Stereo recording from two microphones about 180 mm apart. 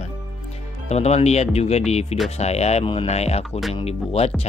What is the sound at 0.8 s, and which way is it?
Speech, 35° left (ahead or behind).